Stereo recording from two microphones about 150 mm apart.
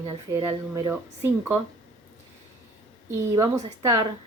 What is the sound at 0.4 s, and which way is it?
A woman's voice, 20° right (ahead or behind).